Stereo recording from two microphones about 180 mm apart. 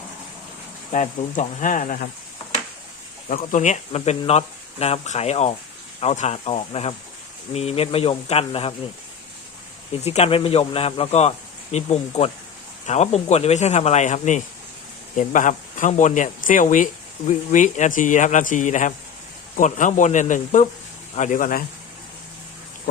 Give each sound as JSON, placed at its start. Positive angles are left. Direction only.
{"t": 0.9, "sound": "speech", "side_deg": 40}
{"t": 3.2, "sound": "speech", "side_deg": 45}
{"t": 10.0, "sound": "speech", "side_deg": 35}